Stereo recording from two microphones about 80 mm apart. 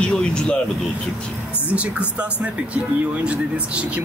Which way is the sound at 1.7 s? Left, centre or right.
Centre.